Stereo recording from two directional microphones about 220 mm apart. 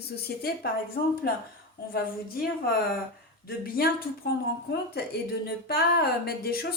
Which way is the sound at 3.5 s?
40° left (ahead or behind).